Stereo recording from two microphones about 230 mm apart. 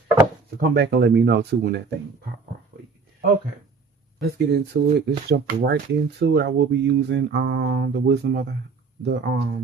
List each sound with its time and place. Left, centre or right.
0.7 s speech: right
4.2 s speech: right